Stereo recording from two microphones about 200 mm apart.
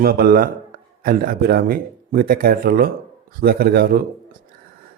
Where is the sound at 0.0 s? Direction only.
50° right (ahead or behind).